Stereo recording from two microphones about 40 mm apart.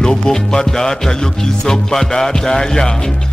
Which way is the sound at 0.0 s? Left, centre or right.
Centre.